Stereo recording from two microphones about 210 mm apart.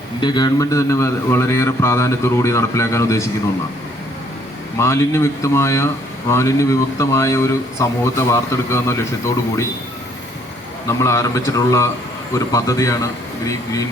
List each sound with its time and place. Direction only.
0.2 s speech: 20° left (ahead or behind)
4.8 s speech: 15° left (ahead or behind)
10.8 s speech: 15° left (ahead or behind)